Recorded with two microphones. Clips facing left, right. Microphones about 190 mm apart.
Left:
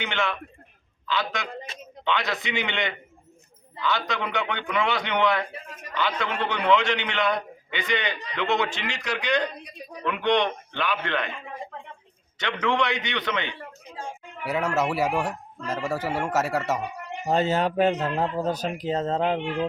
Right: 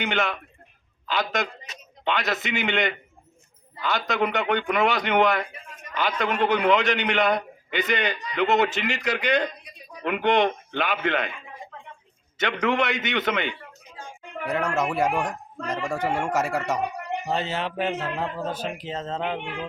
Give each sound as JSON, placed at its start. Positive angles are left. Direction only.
{"t": 0.0, "sound": "a man's voice", "side_deg": -45}
{"t": 5.5, "sound": "a sound", "side_deg": 35}
{"t": 6.0, "sound": "a man's voice", "side_deg": -45}
{"t": 12.6, "sound": "a man's voice", "side_deg": -45}
{"t": 14.4, "sound": "a man's voice", "side_deg": 5}
{"t": 17.2, "sound": "speech", "side_deg": 45}